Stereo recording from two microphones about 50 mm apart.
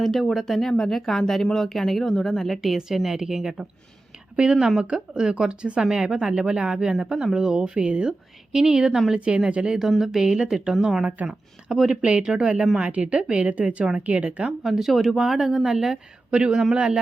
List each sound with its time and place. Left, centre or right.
0.0 s speech: centre
4.8 s speech: centre
14.6 s speech: centre